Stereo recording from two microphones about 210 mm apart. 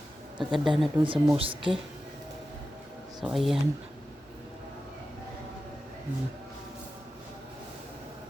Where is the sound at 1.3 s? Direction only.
25° right (ahead or behind).